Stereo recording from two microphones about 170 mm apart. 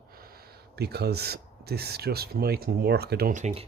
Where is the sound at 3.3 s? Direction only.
40° right (ahead or behind).